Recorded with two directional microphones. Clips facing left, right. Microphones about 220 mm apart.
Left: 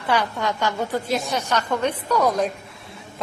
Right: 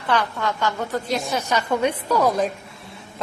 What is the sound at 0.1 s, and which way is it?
A woman's voice, 15° left (ahead or behind).